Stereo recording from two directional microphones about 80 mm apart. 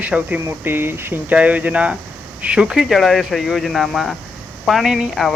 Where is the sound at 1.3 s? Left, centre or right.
Centre.